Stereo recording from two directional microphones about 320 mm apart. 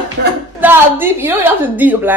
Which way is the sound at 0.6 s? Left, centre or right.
Centre.